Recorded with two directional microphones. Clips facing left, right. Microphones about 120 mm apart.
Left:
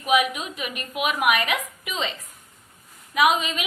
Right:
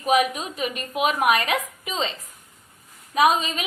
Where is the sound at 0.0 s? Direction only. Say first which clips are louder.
Right 1 dB; 35° right (ahead or behind).